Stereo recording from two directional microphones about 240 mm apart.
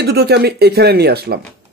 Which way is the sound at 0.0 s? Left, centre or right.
Right.